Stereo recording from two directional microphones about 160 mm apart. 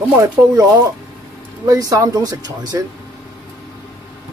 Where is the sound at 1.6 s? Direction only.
20° right (ahead or behind).